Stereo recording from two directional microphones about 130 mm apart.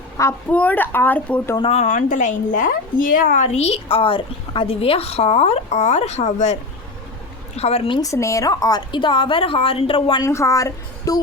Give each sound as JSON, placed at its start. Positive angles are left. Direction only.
{"t": 0.2, "sound": "a woman's voice", "side_deg": 25}
{"t": 0.5, "sound": "speech", "side_deg": 10}
{"t": 1.5, "sound": "a woman's voice", "side_deg": 45}
{"t": 1.8, "sound": "a woman's voice", "side_deg": 75}
{"t": 7.9, "sound": "a woman's voice", "side_deg": 25}
{"t": 10.2, "sound": "a woman's voice", "side_deg": 25}